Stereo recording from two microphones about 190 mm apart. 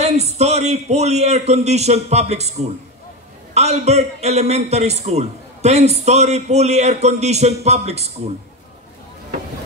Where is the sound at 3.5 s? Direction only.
35° right (ahead or behind).